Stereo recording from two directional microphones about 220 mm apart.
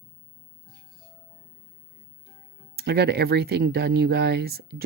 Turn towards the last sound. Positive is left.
turn(degrees=-45)  # may be behind; listen again after turning